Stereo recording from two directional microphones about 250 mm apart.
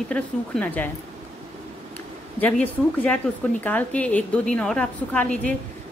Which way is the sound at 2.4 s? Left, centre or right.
Centre.